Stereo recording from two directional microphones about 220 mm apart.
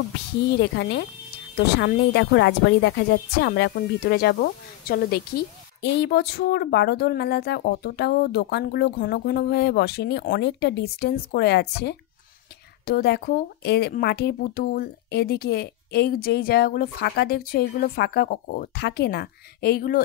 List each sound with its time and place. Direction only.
0.5 s speech: 50° left (ahead or behind)